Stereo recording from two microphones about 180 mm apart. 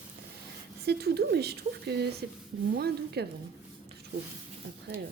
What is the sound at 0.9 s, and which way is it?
A woman's voice, 65° right (ahead or behind).